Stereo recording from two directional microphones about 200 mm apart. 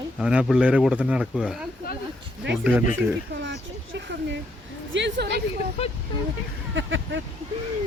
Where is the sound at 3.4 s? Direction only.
60° right (ahead or behind).